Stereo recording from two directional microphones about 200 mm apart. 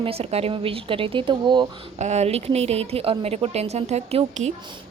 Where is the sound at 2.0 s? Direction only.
35° right (ahead or behind).